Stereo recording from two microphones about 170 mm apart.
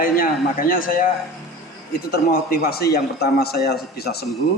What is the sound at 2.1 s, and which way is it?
A man's voice, 65° left (ahead or behind).